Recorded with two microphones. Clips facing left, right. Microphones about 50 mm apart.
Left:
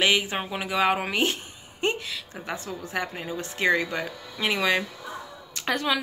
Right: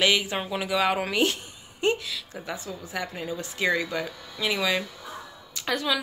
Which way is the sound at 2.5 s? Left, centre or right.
Left.